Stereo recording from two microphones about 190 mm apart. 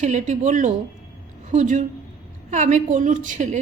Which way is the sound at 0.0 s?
40° right (ahead or behind).